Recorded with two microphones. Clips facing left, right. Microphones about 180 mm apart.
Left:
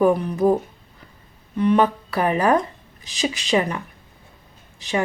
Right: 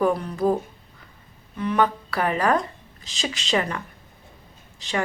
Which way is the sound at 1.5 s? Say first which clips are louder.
Left 5 dB; 25° left (ahead or behind).